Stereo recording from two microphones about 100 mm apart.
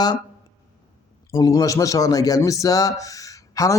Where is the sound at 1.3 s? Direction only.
35° left (ahead or behind).